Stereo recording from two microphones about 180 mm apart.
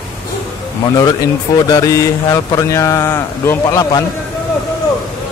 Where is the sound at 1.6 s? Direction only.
20° left (ahead or behind).